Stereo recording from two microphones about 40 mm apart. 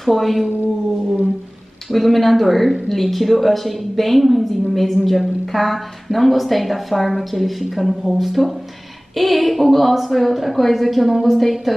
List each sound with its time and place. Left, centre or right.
0.0 s a woman's voice: centre
1.9 s a woman's voice: centre